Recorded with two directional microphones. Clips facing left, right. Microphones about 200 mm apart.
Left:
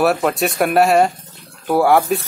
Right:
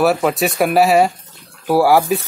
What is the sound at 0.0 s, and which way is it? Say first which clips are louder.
Speech: right 1 dB; centre (ahead or behind).